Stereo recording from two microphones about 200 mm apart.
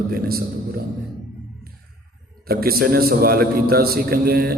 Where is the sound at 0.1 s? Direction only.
50° right (ahead or behind).